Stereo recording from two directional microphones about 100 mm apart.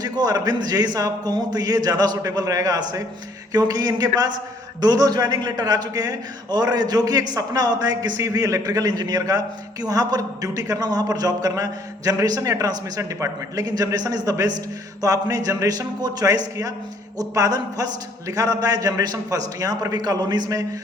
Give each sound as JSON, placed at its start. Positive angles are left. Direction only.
{"t": 0.0, "sound": "a man's voice", "side_deg": -40}